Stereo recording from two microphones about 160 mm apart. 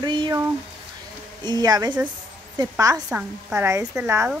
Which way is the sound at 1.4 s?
25° right (ahead or behind).